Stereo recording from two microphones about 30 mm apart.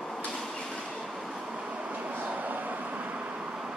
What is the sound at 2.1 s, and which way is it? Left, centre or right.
Vehicle, right.